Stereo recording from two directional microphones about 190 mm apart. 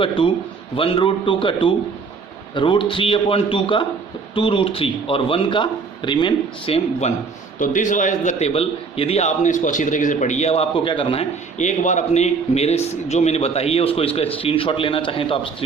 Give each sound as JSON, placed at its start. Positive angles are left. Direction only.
{"t": 0.0, "sound": "speech", "side_deg": 25}
{"t": 7.6, "sound": "a man's voice", "side_deg": 40}